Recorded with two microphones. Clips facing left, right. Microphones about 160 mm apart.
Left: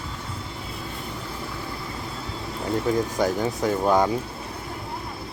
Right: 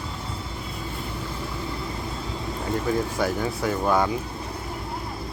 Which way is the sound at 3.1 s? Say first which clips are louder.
Left 2 dB; 20° left (ahead or behind).